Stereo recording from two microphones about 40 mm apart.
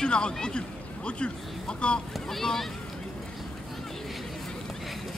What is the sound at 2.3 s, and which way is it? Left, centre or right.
Speech, centre.